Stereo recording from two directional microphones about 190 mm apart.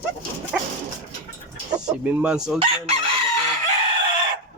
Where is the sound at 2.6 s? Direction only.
30° right (ahead or behind).